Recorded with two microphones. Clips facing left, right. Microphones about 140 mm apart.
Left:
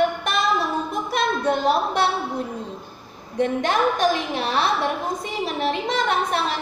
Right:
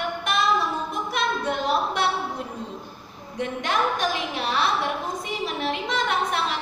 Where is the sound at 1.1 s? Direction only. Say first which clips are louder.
Left 5 dB; 40° left (ahead or behind).